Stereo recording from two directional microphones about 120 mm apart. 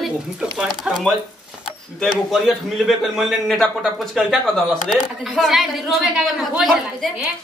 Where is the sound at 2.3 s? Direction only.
Centre (ahead or behind).